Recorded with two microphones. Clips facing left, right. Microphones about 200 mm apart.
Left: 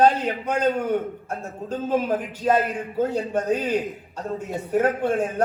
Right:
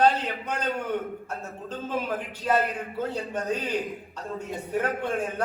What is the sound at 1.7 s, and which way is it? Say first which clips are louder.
A man's voice: left 7 dB; 40° left (ahead or behind).